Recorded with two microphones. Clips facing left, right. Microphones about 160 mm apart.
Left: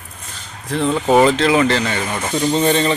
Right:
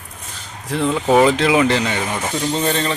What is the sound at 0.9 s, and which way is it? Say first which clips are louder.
Speech: left 1 dB; centre (ahead or behind).